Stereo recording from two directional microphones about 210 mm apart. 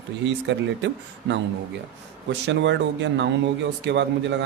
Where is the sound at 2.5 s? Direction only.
60° right (ahead or behind).